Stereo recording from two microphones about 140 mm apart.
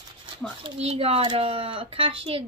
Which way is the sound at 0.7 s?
45° right (ahead or behind).